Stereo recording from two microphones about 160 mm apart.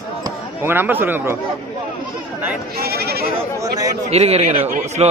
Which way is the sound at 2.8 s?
75° right (ahead or behind).